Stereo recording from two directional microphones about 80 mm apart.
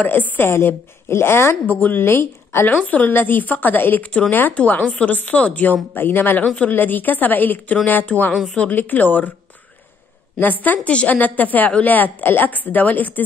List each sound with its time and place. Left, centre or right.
0.0 s a woman's voice: left
10.6 s a woman's voice: centre